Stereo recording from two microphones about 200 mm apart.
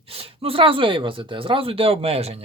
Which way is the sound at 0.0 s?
30° right (ahead or behind).